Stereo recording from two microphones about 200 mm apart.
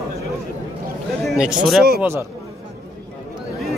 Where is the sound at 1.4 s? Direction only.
5° right (ahead or behind).